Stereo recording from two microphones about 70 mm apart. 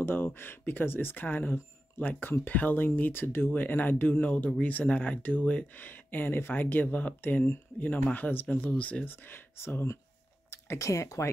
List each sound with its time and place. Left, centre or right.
0.0 s speech: left
9.1 s speech: left
10.5 s a sound: left
10.9 s speech: left